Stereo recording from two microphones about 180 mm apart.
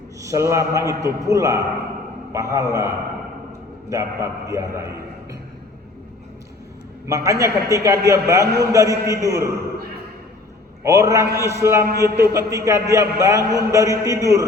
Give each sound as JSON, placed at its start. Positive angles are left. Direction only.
{"t": 0.2, "sound": "a man's voice", "side_deg": -15}
{"t": 3.8, "sound": "a man's voice", "side_deg": -15}
{"t": 7.1, "sound": "a man's voice", "side_deg": -15}
{"t": 10.8, "sound": "a man's voice", "side_deg": -15}